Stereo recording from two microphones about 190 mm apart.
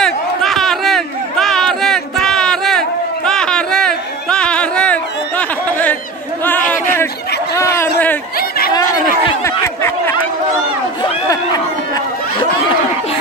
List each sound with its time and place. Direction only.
0.0 s a sound: centre (ahead or behind)
8.4 s chatter: 50° left (ahead or behind)
8.9 s chatter: 15° left (ahead or behind)
11.0 s run: 25° left (ahead or behind)